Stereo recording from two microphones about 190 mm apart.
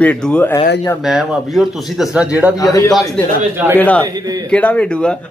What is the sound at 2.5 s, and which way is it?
A man's voice, 15° left (ahead or behind).